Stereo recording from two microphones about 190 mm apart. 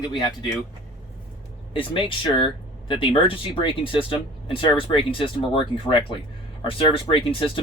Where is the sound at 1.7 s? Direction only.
25° left (ahead or behind).